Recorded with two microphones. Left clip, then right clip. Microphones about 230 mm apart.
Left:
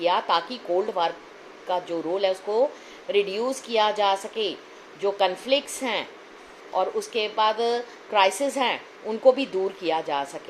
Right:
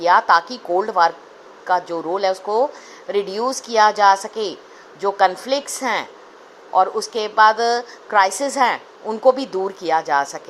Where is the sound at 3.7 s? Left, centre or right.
Right.